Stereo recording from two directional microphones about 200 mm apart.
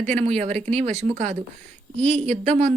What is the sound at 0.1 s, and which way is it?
Speech, 35° right (ahead or behind).